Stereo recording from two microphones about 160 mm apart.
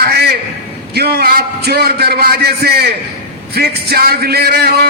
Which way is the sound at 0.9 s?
85° right.